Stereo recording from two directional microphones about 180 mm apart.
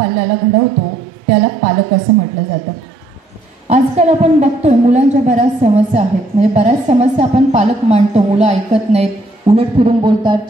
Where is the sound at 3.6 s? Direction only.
40° right (ahead or behind).